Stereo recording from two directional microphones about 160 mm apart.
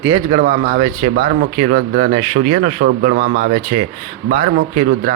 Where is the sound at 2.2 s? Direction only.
45° right (ahead or behind).